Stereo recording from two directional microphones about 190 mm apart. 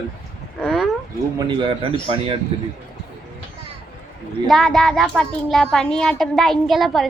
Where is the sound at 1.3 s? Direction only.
25° right (ahead or behind).